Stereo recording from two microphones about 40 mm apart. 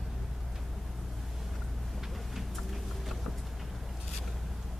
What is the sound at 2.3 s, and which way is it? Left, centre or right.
Vehicle, centre.